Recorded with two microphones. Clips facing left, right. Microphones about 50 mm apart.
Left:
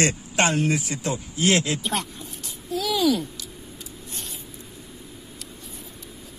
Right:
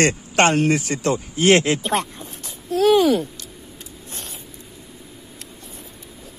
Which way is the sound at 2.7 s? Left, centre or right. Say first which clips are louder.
Right 7 dB; right.